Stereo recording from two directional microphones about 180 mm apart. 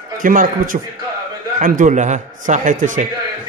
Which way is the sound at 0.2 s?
50° right (ahead or behind).